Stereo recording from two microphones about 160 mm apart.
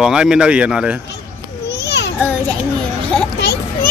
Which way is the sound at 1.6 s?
90° left.